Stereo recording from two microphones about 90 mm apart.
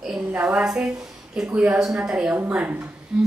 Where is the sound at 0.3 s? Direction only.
15° right (ahead or behind).